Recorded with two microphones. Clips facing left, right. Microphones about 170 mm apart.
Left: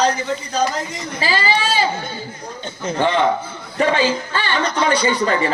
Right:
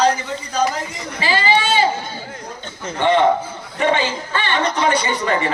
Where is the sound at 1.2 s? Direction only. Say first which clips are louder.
Right 2 dB; 35° left (ahead or behind).